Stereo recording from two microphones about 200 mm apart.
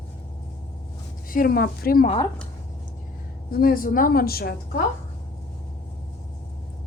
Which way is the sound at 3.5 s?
50° left (ahead or behind).